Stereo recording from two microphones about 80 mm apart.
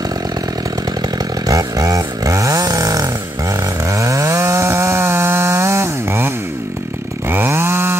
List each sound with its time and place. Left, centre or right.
1.1 s chainsaw: right